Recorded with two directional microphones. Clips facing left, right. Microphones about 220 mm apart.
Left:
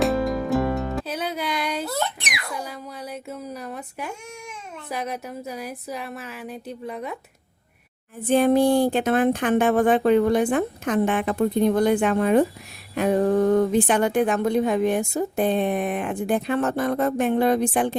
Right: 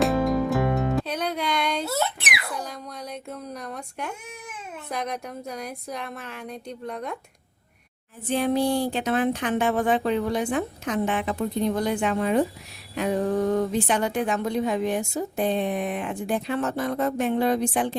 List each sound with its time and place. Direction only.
0.0 s music: centre (ahead or behind)
1.9 s a sound: 5° right (ahead or behind)
2.6 s speech: 5° left (ahead or behind)
8.3 s speech: 50° left (ahead or behind)